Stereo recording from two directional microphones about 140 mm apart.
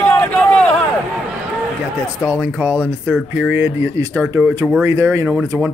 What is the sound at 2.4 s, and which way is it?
Speech, 10° right (ahead or behind).